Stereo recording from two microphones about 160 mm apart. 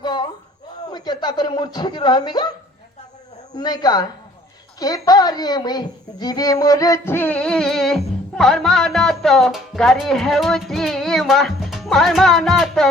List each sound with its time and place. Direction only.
0.0 s a sound: 25° left (ahead or behind)
0.9 s speech: 25° left (ahead or behind)
3.5 s a woman's voice: 25° left (ahead or behind); by 12.9 s centre (ahead or behind)